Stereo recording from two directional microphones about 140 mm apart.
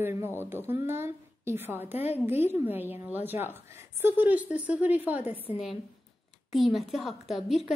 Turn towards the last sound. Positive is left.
turn(degrees=0)  # may be behind; listen again after turning